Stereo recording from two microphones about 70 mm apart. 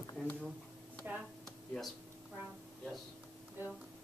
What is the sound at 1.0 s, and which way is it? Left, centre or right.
Speech, right.